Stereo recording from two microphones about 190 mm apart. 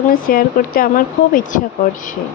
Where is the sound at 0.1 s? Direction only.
50° left (ahead or behind).